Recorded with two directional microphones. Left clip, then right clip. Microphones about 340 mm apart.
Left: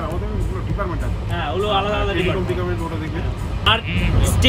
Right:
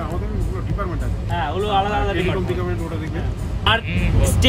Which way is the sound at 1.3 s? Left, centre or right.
Centre.